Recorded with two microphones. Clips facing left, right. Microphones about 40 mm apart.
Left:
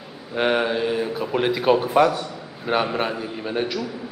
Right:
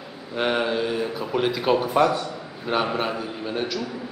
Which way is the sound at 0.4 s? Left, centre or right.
Centre.